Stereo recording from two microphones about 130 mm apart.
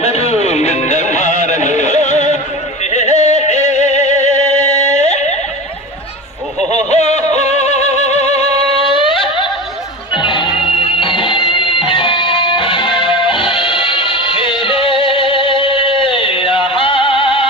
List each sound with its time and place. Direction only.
0.0 s music: 55° left (ahead or behind)
6.7 s a sound: 60° left (ahead or behind)
7.3 s music: 60° left (ahead or behind)
8.9 s music: 40° left (ahead or behind)